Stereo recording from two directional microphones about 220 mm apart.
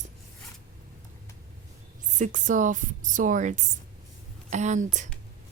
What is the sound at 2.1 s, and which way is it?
Speech, 35° right (ahead or behind).